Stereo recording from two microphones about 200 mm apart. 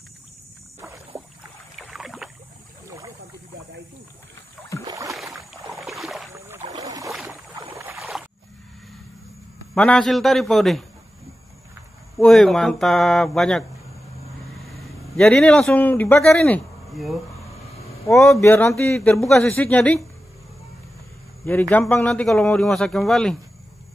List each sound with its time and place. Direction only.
0.7 s rowboat: 15° right (ahead or behind)
1.8 s rowboat: centre (ahead or behind)
4.8 s rowboat: 15° right (ahead or behind)
5.3 s boat: centre (ahead or behind)
5.8 s rowboat: centre (ahead or behind)
6.3 s boat: 10° right (ahead or behind)
7.7 s rowboat: 15° right (ahead or behind)
8.0 s rowboat: centre (ahead or behind)
9.8 s a man's voice: 5° left (ahead or behind)
12.2 s a man's voice: centre (ahead or behind)
15.1 s a man's voice: 5° left (ahead or behind)
18.4 s speech: 10° left (ahead or behind)
21.5 s a man's voice: 10° left (ahead or behind)